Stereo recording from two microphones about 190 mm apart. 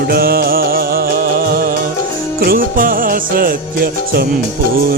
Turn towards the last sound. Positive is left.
turn(degrees=-55)  # may be behind; listen again after turning